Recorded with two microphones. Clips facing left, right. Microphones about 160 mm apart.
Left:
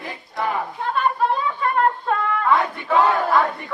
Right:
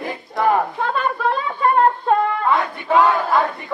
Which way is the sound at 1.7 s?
30° right (ahead or behind).